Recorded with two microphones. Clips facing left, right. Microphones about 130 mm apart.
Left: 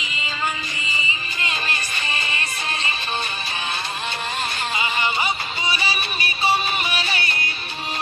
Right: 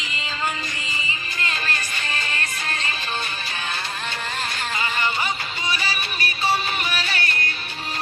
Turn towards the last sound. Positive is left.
turn(degrees=15)  # may be behind; listen again after turning